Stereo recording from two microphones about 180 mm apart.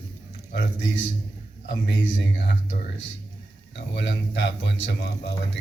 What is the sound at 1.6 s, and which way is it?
A man's voice, 80° left.